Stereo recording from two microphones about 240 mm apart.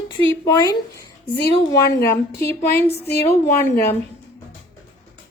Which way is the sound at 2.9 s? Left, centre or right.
Left.